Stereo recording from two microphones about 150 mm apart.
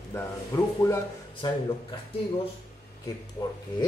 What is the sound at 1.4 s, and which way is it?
Speech, 35° left (ahead or behind).